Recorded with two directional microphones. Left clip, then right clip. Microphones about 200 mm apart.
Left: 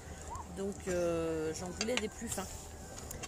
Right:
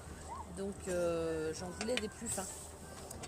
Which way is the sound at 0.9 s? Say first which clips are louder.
Left 1 dB; 25° left (ahead or behind).